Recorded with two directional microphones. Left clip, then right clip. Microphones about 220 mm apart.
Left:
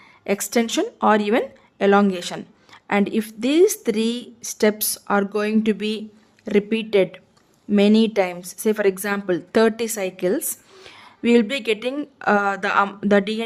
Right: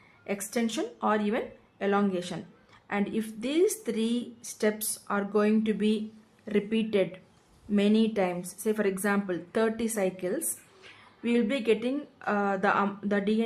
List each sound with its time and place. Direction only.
0.3 s a woman's voice: 45° left (ahead or behind)